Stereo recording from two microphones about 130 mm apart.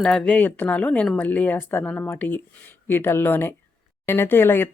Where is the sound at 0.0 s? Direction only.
10° left (ahead or behind).